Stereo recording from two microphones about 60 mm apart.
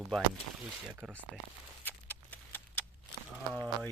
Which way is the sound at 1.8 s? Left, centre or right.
Left.